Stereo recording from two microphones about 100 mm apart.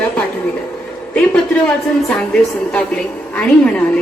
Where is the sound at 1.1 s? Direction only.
10° left (ahead or behind).